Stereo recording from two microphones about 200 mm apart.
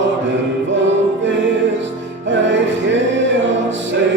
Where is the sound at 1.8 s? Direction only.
65° right (ahead or behind).